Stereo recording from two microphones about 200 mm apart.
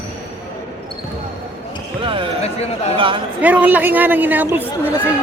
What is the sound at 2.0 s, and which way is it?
Speech, 25° right (ahead or behind).